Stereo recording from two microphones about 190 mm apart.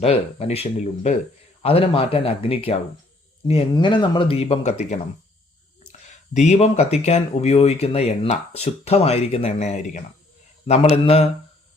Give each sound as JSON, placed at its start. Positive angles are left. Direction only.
{"t": 0.0, "sound": "speech", "side_deg": 35}
{"t": 6.3, "sound": "speech", "side_deg": 35}